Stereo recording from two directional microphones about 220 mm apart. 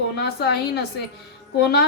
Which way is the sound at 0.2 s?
50° left (ahead or behind).